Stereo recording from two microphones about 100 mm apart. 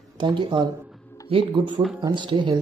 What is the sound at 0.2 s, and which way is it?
Speech, 50° right (ahead or behind).